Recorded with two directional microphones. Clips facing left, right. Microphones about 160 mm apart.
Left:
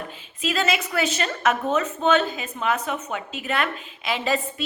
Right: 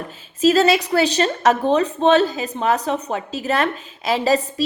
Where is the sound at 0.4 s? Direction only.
35° right (ahead or behind).